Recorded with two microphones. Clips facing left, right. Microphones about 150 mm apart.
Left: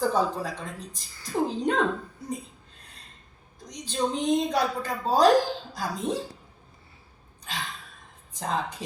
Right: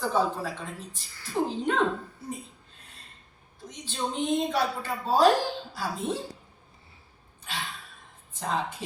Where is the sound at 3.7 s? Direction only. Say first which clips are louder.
Left 5 dB; 40° left (ahead or behind).